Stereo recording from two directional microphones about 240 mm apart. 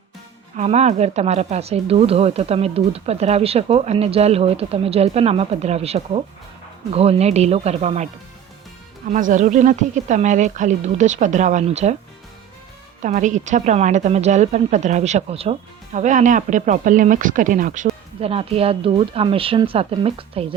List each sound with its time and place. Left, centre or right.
0.5 s a woman's voice: right
9.1 s a woman's voice: right
13.0 s a woman's voice: right